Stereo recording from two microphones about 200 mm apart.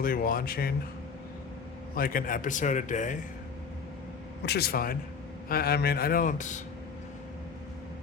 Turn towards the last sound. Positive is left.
turn(degrees=40)  # may be behind; listen again after turning